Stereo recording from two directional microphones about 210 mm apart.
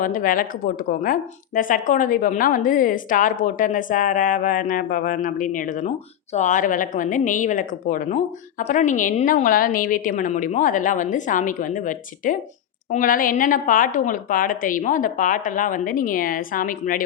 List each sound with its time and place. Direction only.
0.0 s a woman's voice: 40° left (ahead or behind)